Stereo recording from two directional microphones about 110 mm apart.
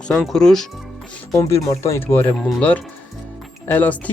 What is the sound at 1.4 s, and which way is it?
Speech, 25° left (ahead or behind).